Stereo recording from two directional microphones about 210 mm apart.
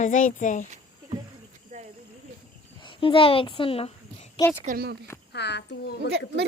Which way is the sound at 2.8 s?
25° left (ahead or behind).